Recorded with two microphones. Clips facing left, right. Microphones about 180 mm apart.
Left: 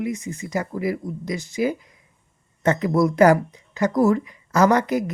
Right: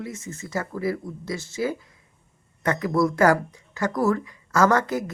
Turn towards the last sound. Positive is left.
turn(degrees=15)  # may be behind; listen again after turning